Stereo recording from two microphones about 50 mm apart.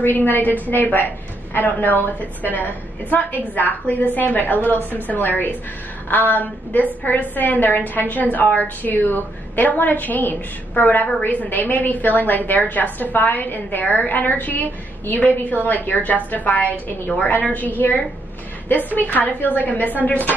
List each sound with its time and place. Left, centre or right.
0.0 s a woman's voice: left
18.7 s a woman's voice: left